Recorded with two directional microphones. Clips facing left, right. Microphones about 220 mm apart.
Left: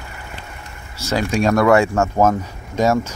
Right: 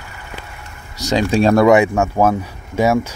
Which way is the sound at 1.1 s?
25° right (ahead or behind).